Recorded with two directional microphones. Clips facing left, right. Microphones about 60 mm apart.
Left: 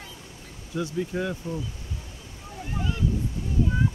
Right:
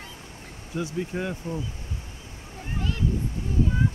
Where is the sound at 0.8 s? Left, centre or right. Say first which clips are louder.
Left 1 dB; right.